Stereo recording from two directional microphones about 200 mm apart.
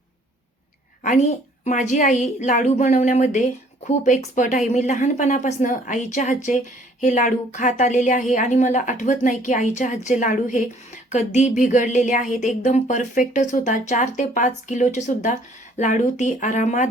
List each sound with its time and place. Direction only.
1.0 s a woman's voice: 35° left (ahead or behind)